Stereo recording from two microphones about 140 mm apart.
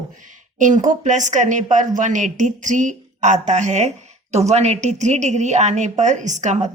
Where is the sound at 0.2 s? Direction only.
65° right (ahead or behind).